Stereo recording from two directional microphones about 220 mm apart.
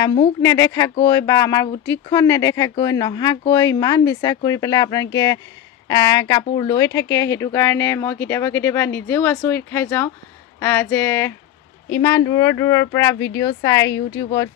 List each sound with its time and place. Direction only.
0.0 s speech: 25° left (ahead or behind)